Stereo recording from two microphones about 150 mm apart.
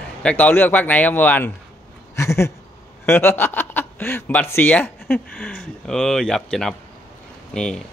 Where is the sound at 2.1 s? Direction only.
20° left (ahead or behind).